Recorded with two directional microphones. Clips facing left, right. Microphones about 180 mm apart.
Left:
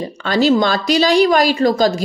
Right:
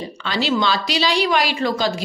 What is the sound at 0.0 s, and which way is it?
A woman's voice, 45° left (ahead or behind).